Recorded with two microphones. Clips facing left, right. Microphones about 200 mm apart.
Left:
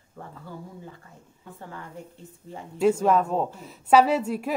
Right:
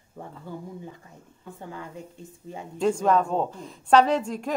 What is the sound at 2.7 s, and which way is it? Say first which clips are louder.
A woman's voice: left 1 dB; 5° left (ahead or behind).